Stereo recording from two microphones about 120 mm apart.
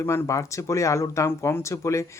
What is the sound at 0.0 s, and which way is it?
Speech, 20° left (ahead or behind).